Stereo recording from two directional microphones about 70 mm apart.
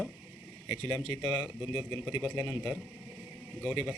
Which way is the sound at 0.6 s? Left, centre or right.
Right.